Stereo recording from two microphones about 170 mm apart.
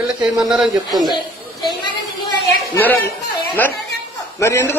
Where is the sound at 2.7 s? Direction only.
10° left (ahead or behind).